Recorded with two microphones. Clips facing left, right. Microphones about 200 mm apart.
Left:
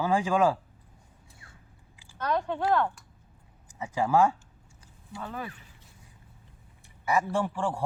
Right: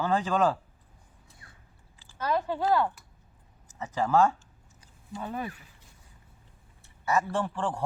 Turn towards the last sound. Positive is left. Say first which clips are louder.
# left 1 dB
turn(degrees=10)  # may be behind; listen again after turning